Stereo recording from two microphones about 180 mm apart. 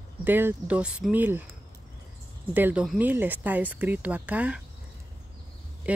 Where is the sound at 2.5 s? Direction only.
10° right (ahead or behind).